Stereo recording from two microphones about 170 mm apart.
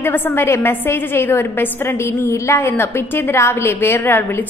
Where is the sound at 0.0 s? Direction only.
15° left (ahead or behind).